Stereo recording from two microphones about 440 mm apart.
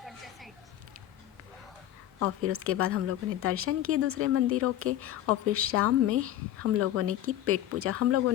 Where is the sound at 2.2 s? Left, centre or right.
Right.